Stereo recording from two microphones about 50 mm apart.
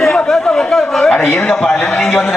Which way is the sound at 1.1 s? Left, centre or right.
Centre.